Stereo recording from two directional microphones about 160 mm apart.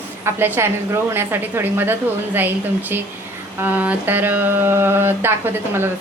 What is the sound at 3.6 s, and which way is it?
Speech, 10° right (ahead or behind).